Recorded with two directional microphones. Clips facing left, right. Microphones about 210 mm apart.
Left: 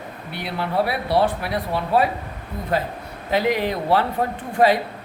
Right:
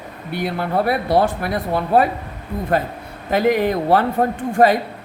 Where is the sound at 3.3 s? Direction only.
50° right (ahead or behind).